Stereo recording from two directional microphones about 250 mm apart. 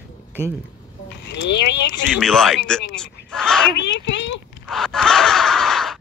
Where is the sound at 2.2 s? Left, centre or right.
Centre.